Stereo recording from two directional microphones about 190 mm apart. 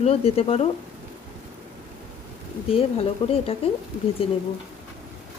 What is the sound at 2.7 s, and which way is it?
Speech, 30° left (ahead or behind).